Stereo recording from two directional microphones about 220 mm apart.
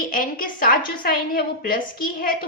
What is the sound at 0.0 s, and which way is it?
A woman's voice, 40° left (ahead or behind).